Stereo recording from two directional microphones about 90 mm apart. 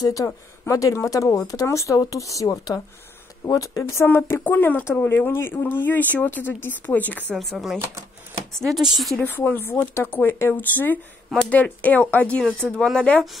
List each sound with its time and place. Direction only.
0.0 s speech: 40° left (ahead or behind); by 7.3 s 20° left (ahead or behind)
7.3 s speech: centre (ahead or behind)
9.2 s speech: 20° left (ahead or behind)